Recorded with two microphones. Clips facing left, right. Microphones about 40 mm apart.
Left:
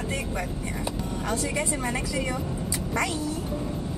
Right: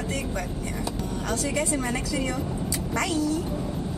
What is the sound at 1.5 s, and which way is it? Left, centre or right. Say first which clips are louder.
A woman's voice: right 1 dB; centre.